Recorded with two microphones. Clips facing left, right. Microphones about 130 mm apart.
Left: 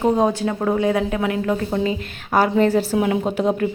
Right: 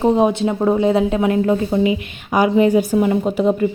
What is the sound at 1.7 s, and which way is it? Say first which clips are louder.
Speech: right 4 dB; 15° right (ahead or behind).